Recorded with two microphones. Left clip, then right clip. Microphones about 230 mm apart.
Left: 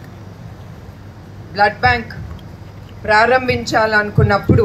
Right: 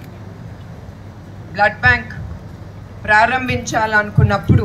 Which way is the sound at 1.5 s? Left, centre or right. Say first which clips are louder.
Even; left.